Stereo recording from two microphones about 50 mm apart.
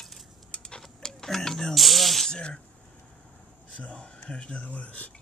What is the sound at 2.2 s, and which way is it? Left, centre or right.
Speech, centre.